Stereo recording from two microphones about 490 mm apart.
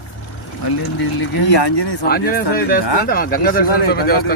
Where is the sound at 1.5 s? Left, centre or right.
Left.